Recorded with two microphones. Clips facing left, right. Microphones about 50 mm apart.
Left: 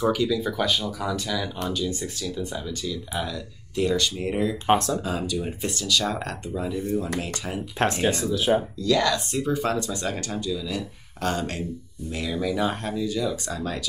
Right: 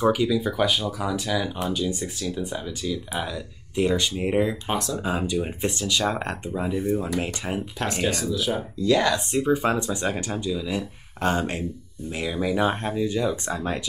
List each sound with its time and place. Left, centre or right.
0.0 s speech: centre
4.6 s speech: left
5.0 s speech: right
7.8 s speech: left
8.8 s speech: centre